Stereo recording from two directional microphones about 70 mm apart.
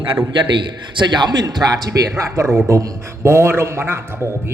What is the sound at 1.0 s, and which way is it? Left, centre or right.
A man's voice, right.